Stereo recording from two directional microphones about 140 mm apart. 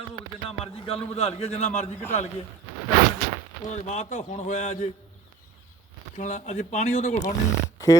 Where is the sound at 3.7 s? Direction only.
55° left (ahead or behind).